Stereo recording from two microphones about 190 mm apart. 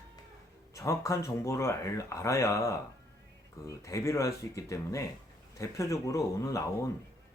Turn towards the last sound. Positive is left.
turn(degrees=15)  # may be behind; listen again after turning